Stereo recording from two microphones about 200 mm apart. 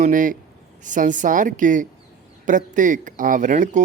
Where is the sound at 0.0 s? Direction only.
40° right (ahead or behind).